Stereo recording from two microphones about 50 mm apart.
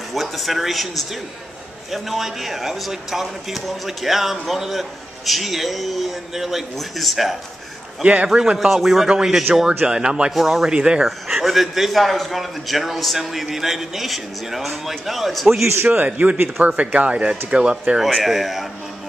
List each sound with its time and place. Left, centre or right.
0.1 s speech: centre
8.0 s speech: right
8.3 s speech: centre
10.3 s speech: centre
10.7 s speech: centre
11.1 s speech: centre
15.6 s a man's voice: right
15.9 s speech: right
18.0 s speech: centre